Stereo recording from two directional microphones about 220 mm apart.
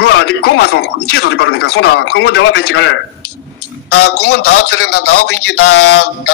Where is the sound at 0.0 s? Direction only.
50° left (ahead or behind).